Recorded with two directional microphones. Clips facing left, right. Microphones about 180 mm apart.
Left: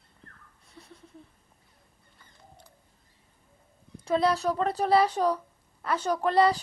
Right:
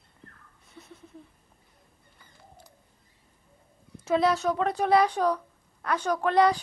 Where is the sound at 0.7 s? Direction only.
Centre (ahead or behind).